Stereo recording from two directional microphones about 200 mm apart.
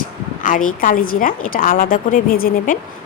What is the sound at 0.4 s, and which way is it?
A woman's voice, 40° left (ahead or behind).